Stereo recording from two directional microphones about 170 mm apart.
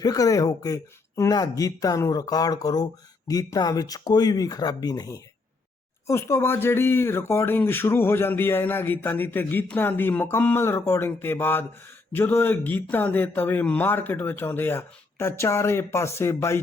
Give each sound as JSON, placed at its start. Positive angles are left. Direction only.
{"t": 0.0, "sound": "speech", "side_deg": 20}